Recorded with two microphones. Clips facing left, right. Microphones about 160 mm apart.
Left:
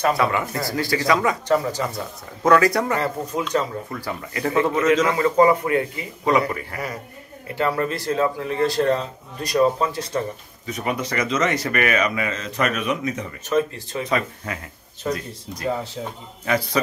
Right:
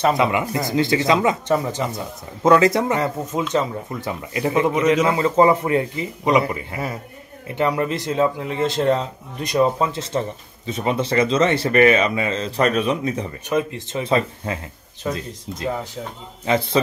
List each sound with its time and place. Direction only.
0.0 s speech: 20° right (ahead or behind)
13.5 s speech: 20° right (ahead or behind)